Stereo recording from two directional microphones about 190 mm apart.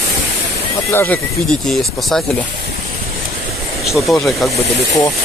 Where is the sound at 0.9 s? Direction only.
10° left (ahead or behind).